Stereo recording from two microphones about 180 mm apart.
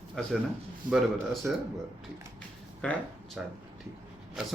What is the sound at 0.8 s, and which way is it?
Speech, 50° right (ahead or behind).